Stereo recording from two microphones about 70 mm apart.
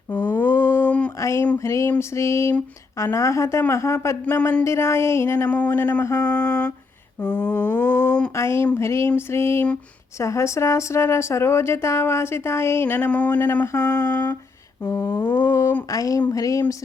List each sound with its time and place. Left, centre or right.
0.1 s a sound: left
1.2 s a sound: left
1.5 s a man's voice: left
5.5 s mantra: left
6.0 s a man's voice: left
6.2 s mantra: centre
8.4 s speech: left
13.7 s a man's voice: left
14.1 s mantra: left
14.8 s a man's voice: left
15.2 s speech: left
15.9 s a sound: left